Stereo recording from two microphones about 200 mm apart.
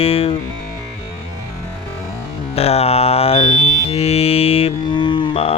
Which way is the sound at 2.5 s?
30° left (ahead or behind).